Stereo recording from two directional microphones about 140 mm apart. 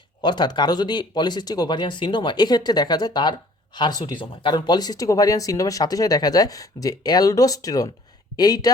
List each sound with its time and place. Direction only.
0.2 s speech: 30° left (ahead or behind)